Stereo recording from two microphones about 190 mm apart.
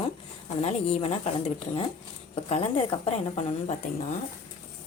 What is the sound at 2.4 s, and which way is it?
A woman's voice, 30° left (ahead or behind).